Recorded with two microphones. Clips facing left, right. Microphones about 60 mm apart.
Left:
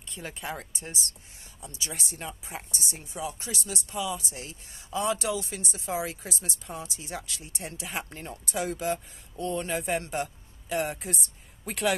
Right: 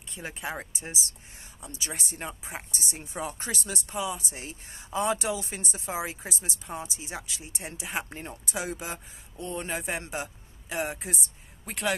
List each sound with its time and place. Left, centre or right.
0.1 s speech: centre; by 3.2 s right
3.2 s speech: right
5.9 s speech: centre
9.4 s speech: centre